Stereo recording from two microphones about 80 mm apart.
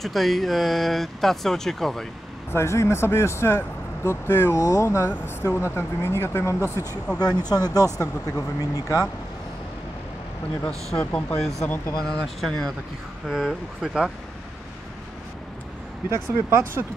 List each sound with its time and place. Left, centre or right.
0.0 s speech: centre
2.5 s speech: left
4.6 s speech: left
6.6 s speech: right
7.2 s speech: left
11.0 s speech: centre
12.0 s speech: centre
13.3 s speech: centre
16.1 s speech: right